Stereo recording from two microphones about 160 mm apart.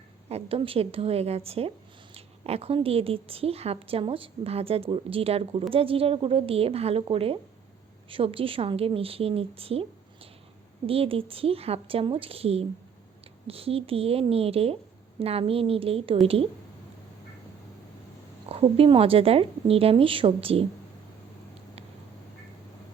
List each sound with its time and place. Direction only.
0.3 s a woman's voice: 40° right (ahead or behind)
10.8 s a woman's voice: 35° right (ahead or behind)
18.4 s a woman's voice: 35° right (ahead or behind)